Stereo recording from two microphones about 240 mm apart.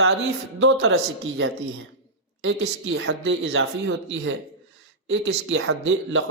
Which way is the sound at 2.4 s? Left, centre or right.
Right.